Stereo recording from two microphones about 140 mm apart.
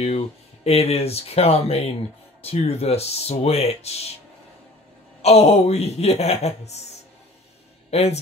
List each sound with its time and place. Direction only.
0.7 s speech: 45° left (ahead or behind)
5.2 s speech: 50° left (ahead or behind)